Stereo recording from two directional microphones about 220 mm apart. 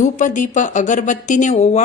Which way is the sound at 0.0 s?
35° left (ahead or behind).